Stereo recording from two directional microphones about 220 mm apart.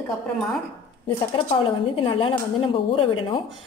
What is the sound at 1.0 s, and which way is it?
A woman's voice, 25° left (ahead or behind).